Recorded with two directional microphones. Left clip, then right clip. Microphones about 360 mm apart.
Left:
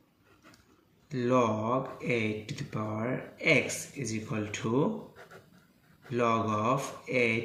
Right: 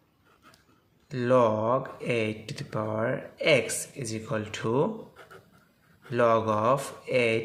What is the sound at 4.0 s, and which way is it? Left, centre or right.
Speech, right.